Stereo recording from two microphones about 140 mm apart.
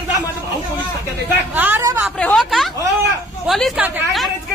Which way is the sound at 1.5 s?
15° right (ahead or behind).